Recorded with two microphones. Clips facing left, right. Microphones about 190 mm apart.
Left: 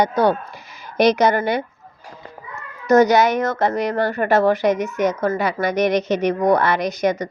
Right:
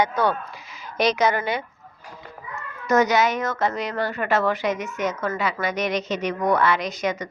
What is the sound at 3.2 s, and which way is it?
Speech, 65° left (ahead or behind).